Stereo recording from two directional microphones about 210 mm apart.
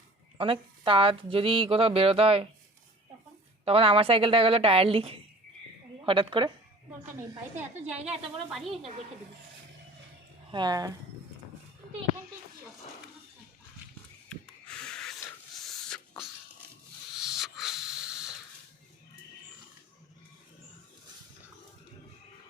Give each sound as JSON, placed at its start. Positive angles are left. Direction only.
{"t": 0.3, "sound": "speech", "side_deg": -25}
{"t": 3.7, "sound": "speech", "side_deg": -25}
{"t": 8.4, "sound": "a woman's voice", "side_deg": 0}
{"t": 10.5, "sound": "speech", "side_deg": -20}
{"t": 14.3, "sound": "a sound", "side_deg": 5}
{"t": 17.2, "sound": "a sound", "side_deg": 0}